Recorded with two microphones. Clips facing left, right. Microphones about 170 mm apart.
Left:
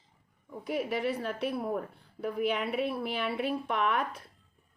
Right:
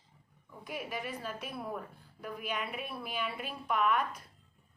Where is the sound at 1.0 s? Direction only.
65° left (ahead or behind).